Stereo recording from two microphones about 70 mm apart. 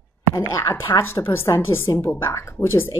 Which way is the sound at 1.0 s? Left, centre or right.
Left.